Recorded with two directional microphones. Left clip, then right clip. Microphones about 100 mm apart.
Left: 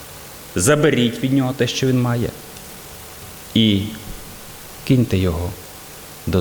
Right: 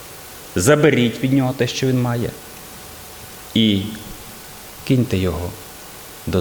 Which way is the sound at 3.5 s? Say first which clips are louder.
Even; centre (ahead or behind).